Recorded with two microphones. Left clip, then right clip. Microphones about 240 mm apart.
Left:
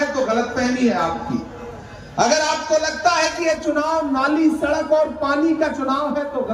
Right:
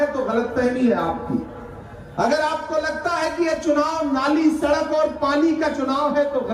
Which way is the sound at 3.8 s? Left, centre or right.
Centre.